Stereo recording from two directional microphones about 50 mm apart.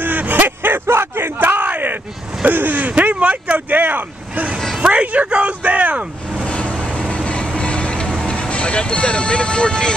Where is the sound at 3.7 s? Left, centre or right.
Right.